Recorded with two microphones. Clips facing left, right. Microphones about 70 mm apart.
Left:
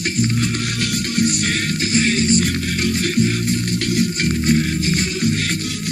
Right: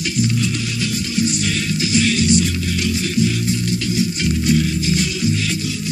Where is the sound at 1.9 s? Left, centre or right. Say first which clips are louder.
Right 1 dB; left.